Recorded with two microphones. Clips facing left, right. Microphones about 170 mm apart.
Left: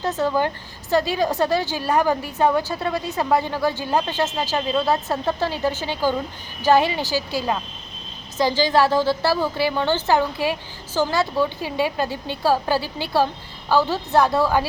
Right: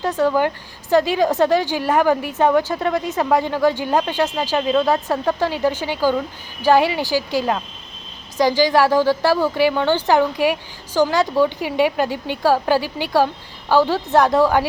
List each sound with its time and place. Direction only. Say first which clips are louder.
0.1 s a woman's voice: right 5 dB; 15° left (ahead or behind)
0.4 s a woman's voice: right 4 dB; 15° right (ahead or behind)